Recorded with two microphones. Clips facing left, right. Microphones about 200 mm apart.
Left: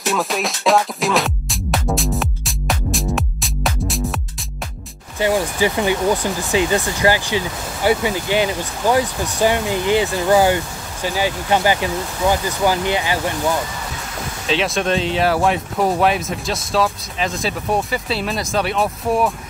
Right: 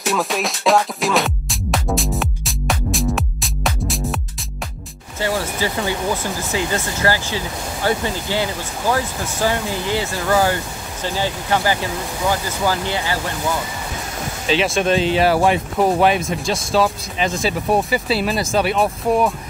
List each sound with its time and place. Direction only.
0.0 s music: centre (ahead or behind)
5.2 s speech: 15° left (ahead or behind)
14.5 s speech: centre (ahead or behind)